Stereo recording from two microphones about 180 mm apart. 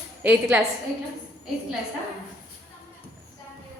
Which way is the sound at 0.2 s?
10° right (ahead or behind).